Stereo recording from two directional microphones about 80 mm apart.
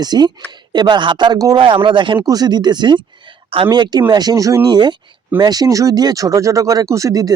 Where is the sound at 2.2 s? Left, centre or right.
Right.